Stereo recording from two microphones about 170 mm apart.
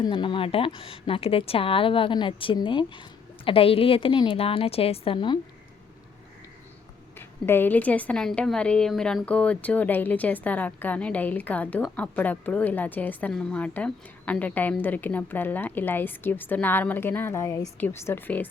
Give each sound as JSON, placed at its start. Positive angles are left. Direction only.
{"t": 0.0, "sound": "a woman's voice", "side_deg": 30}
{"t": 7.2, "sound": "a woman's voice", "side_deg": 15}